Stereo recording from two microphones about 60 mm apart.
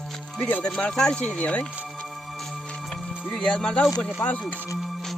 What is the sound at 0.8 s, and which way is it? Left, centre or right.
Speech, centre.